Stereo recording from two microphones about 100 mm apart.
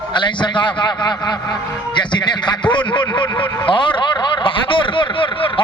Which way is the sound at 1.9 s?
50° left (ahead or behind).